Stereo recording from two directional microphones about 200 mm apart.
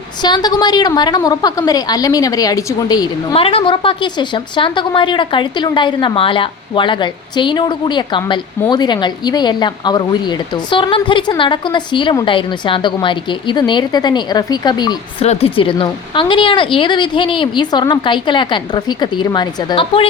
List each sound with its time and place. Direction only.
0.2 s a woman's voice: 20° left (ahead or behind)